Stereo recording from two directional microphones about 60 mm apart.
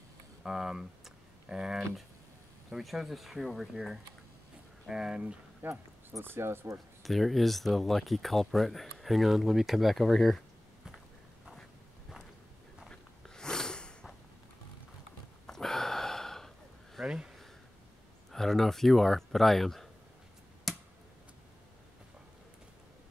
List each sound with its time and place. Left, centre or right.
0.4 s speech: centre
5.6 s speech: right
7.0 s speech: centre
12.8 s a sound: centre
15.4 s gasp: centre
18.3 s speech: centre
20.7 s a sound: centre